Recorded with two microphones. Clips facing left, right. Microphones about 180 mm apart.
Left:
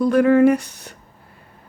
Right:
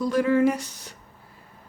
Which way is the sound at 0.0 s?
60° left (ahead or behind).